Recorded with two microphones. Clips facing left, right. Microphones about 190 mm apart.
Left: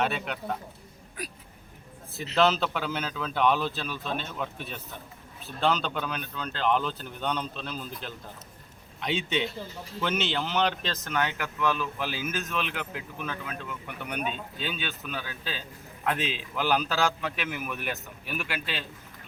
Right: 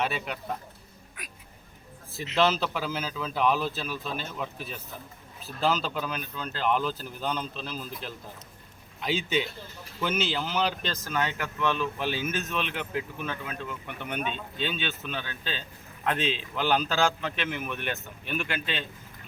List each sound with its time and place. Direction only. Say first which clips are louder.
0.0 s speech: left 1 dB; centre (ahead or behind)
1.2 s speech: left 9 dB; 35° left (ahead or behind)
2.3 s a man's voice: left 1 dB; centre (ahead or behind)